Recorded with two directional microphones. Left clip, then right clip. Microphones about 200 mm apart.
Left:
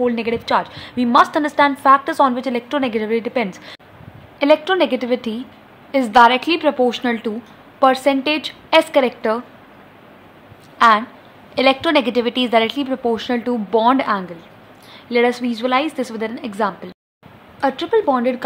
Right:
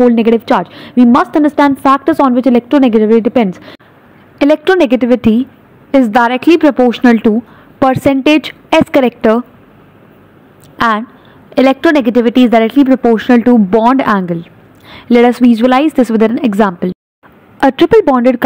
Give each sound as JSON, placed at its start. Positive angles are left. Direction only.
{"t": 0.0, "sound": "a woman's voice", "side_deg": -25}
{"t": 10.8, "sound": "a woman's voice", "side_deg": -25}